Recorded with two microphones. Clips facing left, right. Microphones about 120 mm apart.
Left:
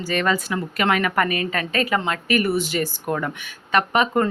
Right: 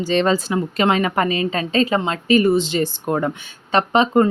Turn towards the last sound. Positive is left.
turn(degrees=-25)  # may be behind; listen again after turning